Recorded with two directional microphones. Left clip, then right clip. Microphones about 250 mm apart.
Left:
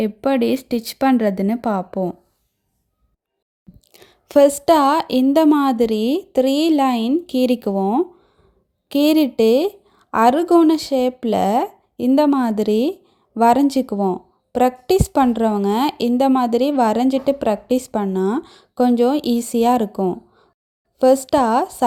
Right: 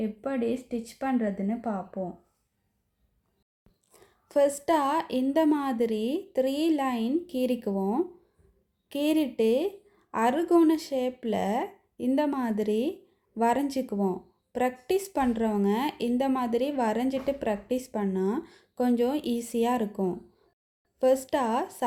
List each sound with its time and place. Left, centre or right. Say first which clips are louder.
0.0 s a woman's voice: left 12 dB; left
3.9 s a woman's voice: left 11 dB; left